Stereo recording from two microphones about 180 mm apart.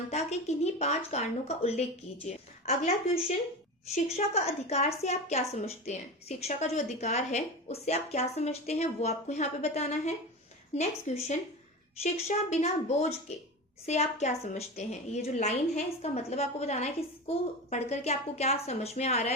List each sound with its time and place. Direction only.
0.1 s a woman's voice: 35° left (ahead or behind)
4.4 s a woman's voice: 35° left (ahead or behind)